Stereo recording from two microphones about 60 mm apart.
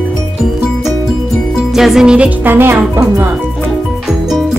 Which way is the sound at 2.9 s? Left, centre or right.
Right.